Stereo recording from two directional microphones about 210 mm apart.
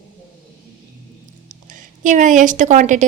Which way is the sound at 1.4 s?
40° right (ahead or behind).